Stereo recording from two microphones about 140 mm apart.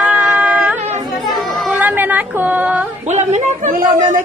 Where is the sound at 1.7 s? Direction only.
10° right (ahead or behind).